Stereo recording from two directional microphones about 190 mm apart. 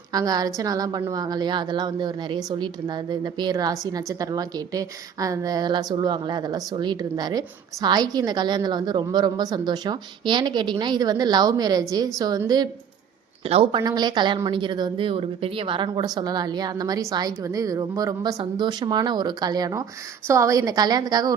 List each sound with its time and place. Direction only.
0.1 s a woman's voice: 20° right (ahead or behind)